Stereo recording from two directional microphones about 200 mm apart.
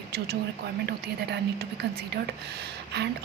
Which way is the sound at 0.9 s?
55° right (ahead or behind).